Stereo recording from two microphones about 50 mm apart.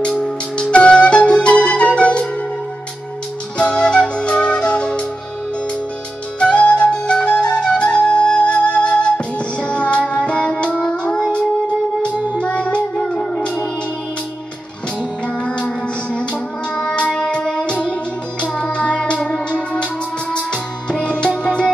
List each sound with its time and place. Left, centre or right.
0.0 s music: centre
3.5 s flute: left
6.4 s flute: left
12.4 s music: left
15.0 s music: left